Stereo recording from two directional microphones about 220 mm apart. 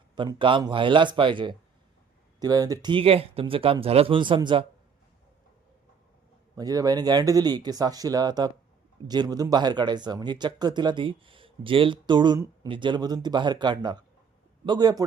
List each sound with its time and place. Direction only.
0.2 s speech: 20° right (ahead or behind)
6.6 s speech: 15° right (ahead or behind)